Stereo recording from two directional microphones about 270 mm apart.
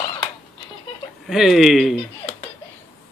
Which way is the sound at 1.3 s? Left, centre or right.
Centre.